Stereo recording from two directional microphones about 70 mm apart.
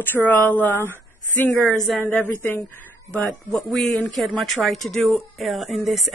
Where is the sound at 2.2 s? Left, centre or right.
Left.